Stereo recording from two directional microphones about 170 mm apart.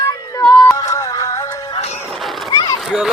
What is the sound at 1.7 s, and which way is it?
Music, 40° left (ahead or behind).